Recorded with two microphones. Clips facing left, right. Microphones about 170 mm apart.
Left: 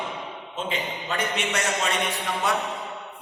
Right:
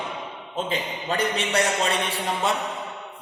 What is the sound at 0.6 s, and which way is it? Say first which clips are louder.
Speech: right 1 dB; 35° right (ahead or behind).